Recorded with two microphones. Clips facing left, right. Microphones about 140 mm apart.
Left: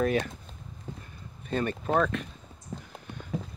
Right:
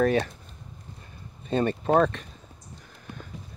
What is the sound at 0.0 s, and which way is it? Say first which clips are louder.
Speech: right 4 dB; 40° right (ahead or behind).